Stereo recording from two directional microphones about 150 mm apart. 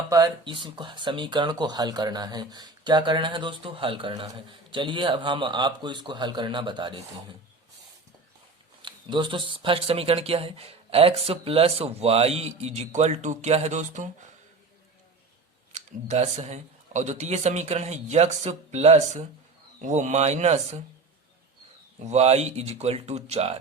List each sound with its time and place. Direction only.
0.1 s speech: 30° right (ahead or behind)
8.8 s speech: 30° right (ahead or behind); by 14.1 s 55° right (ahead or behind)
15.7 s speech: 50° right (ahead or behind)
22.0 s speech: 45° right (ahead or behind)